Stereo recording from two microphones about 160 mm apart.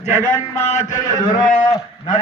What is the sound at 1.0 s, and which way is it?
Speech, 25° left (ahead or behind).